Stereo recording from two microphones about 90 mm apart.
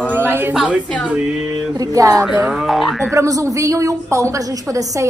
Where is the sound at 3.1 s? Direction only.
35° right (ahead or behind).